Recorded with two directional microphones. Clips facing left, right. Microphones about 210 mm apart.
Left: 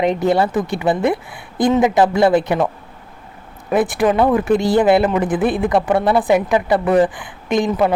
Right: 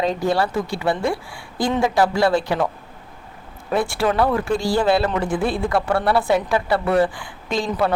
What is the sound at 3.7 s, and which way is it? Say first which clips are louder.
A man's voice: left 4 dB; 20° left (ahead or behind).